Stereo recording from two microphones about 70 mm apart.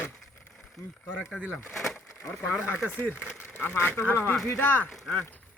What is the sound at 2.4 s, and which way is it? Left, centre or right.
Speech, left.